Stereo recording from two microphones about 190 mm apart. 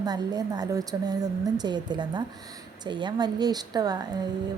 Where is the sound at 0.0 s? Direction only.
20° right (ahead or behind).